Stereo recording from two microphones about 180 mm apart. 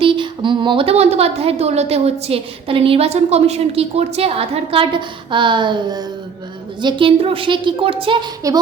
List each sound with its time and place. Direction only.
0.0 s a woman's voice: 25° right (ahead or behind)